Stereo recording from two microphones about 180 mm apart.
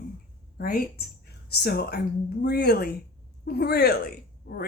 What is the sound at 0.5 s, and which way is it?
Speech, 55° left (ahead or behind).